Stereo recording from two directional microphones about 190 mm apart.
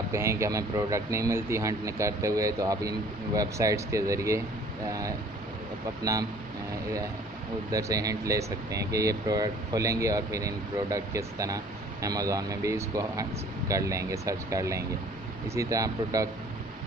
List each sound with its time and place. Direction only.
0.1 s speech: 15° right (ahead or behind)
7.7 s speech: 20° right (ahead or behind)